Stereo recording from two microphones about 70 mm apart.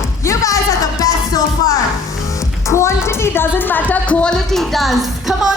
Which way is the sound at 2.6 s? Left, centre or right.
Left.